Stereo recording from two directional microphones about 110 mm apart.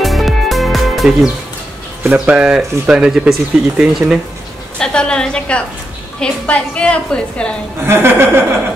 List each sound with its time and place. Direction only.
0.0 s music: centre (ahead or behind)
2.0 s speech: 10° right (ahead or behind)
4.7 s a woman's voice: 10° left (ahead or behind)
7.8 s speech: 25° right (ahead or behind)